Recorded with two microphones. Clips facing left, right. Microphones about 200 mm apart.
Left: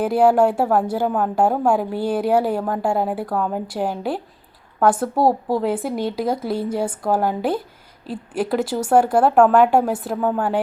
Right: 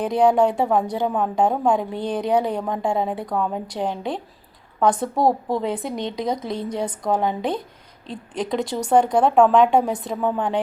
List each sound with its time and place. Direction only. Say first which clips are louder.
0.0 s a woman's voice: left 2 dB; 5° left (ahead or behind)